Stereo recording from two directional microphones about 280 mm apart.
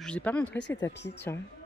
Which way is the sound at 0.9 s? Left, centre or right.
Left.